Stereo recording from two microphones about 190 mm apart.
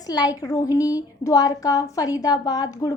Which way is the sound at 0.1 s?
20° left (ahead or behind).